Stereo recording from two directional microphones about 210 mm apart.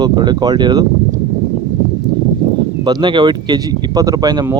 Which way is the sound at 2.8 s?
20° right (ahead or behind).